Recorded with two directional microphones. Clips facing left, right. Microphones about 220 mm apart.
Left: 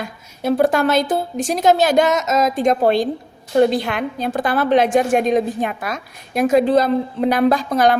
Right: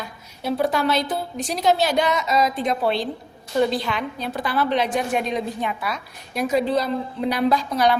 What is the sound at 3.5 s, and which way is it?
A woman's voice, 60° left (ahead or behind).